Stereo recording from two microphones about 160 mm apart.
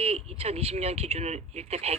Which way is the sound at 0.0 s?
40° right (ahead or behind).